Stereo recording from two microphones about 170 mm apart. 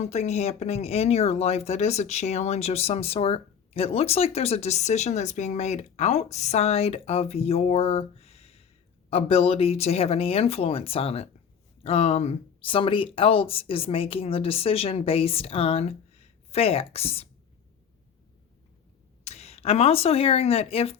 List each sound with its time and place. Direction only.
0.0 s speech: 40° left (ahead or behind)
19.2 s speech: 40° left (ahead or behind)